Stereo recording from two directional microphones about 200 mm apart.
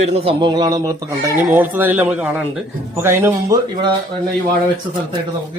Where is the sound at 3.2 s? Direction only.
20° right (ahead or behind).